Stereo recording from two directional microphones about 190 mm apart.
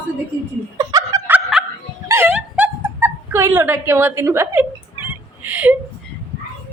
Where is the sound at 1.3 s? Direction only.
5° right (ahead or behind).